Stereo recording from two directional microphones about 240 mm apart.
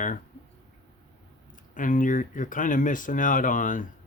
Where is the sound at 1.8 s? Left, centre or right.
Left.